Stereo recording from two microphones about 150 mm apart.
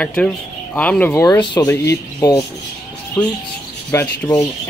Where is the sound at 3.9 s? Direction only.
20° left (ahead or behind).